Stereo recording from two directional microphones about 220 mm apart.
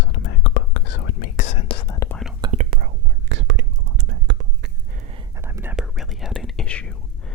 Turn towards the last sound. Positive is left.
turn(degrees=5)  # may be behind; listen again after turning